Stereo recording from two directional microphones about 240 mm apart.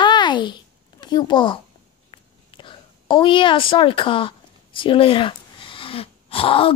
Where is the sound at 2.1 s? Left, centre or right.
Left.